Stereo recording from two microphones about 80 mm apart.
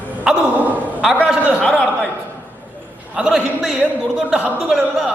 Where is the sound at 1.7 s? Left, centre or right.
Centre.